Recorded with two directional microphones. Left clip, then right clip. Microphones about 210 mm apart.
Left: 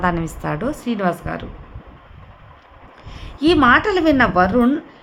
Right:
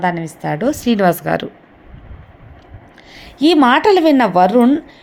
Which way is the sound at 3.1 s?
15° right (ahead or behind).